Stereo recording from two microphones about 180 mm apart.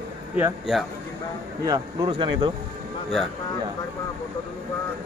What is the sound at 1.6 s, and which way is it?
Speech, 20° right (ahead or behind).